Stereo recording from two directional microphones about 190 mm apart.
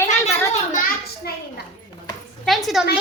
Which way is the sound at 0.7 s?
45° left (ahead or behind).